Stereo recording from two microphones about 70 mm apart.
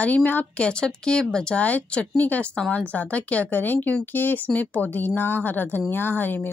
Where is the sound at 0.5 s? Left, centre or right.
Centre.